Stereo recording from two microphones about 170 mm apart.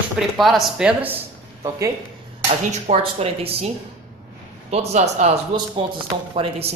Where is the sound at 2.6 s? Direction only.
40° right (ahead or behind).